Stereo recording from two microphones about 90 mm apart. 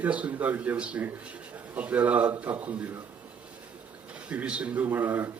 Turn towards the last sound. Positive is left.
turn(degrees=-25)  # may be behind; listen again after turning